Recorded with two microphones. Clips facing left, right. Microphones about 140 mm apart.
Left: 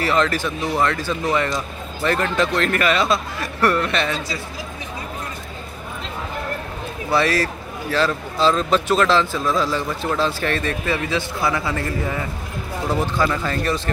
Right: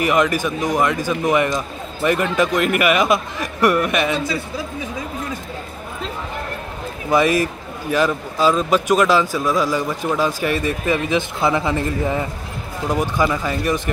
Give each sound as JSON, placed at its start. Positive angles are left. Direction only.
{"t": 0.0, "sound": "a man's voice", "side_deg": -15}
{"t": 7.1, "sound": "a man's voice", "side_deg": -15}